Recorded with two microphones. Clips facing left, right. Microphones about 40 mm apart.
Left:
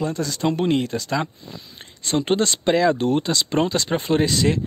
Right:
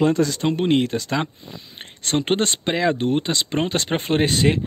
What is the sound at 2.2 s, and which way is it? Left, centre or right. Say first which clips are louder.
Speech: left 2 dB; right.